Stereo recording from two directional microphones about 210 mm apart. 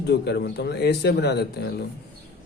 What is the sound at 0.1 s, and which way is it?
Speech, 50° left (ahead or behind).